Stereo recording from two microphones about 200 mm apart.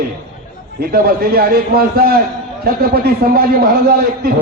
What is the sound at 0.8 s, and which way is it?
A man's voice, 50° right (ahead or behind).